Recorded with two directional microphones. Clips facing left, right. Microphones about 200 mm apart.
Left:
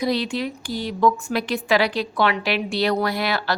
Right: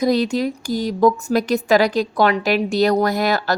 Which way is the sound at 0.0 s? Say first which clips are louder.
Right 5 dB; 45° right (ahead or behind).